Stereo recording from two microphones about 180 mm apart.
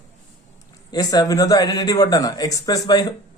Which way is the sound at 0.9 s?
20° left (ahead or behind).